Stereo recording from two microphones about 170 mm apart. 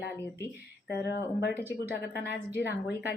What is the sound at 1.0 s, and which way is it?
A woman's voice, 75° left (ahead or behind).